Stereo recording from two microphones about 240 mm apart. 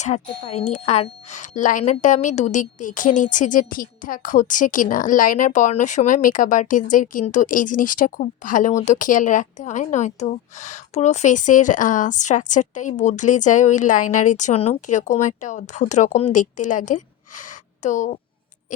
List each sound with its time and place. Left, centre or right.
0.0 s speech: left